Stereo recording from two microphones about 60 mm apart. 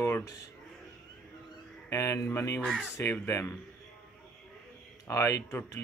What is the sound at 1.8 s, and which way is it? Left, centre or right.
Speech, left.